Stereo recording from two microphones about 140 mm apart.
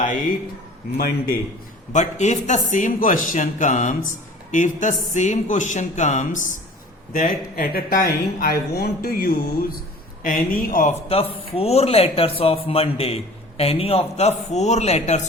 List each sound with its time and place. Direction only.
0.9 s speech: 90° left
1.9 s speech: 55° left (ahead or behind)
7.1 s speech: 75° left (ahead or behind)
11.1 s speech: 45° left (ahead or behind)